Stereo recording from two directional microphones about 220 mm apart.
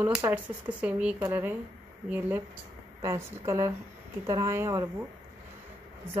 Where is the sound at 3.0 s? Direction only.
15° right (ahead or behind).